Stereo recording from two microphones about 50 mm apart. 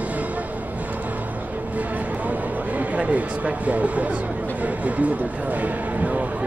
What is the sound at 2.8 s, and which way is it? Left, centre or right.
Speech, right.